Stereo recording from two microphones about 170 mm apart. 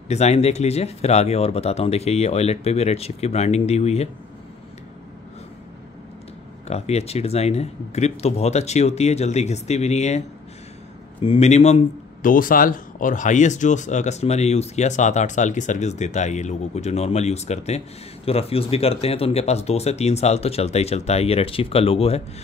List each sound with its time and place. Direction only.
0.1 s speech: 40° left (ahead or behind)
6.7 s speech: 40° left (ahead or behind)